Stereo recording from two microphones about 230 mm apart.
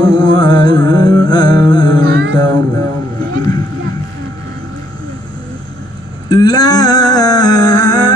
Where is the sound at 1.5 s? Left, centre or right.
Right.